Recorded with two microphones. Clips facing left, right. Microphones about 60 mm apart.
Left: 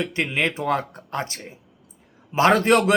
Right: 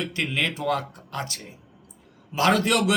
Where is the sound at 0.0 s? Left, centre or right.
Left.